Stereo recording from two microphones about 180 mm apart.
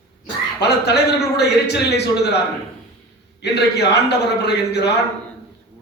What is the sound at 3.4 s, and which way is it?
A man's voice, 65° left (ahead or behind).